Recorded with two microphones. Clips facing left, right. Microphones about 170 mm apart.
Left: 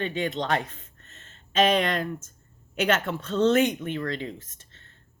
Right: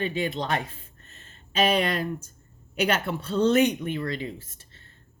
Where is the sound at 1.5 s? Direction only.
10° right (ahead or behind).